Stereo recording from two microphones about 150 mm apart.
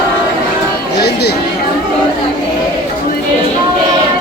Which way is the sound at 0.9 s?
90° left.